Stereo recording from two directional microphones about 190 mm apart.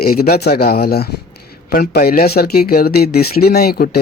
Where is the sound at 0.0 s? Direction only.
50° left (ahead or behind).